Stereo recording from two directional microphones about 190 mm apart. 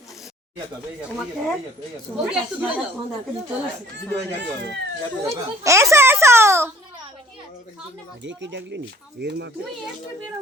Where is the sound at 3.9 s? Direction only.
65° right (ahead or behind).